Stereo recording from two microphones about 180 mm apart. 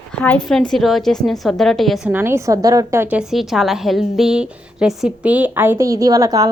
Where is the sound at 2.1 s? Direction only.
15° right (ahead or behind).